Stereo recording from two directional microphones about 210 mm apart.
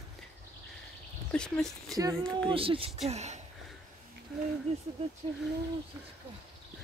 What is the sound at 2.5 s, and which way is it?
Speech, 25° right (ahead or behind).